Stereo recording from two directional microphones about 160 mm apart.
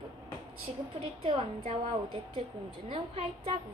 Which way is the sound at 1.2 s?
40° right (ahead or behind).